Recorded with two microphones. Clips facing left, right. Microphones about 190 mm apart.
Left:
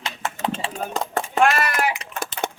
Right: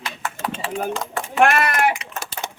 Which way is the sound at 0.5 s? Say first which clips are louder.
Right 2 dB; 40° left (ahead or behind).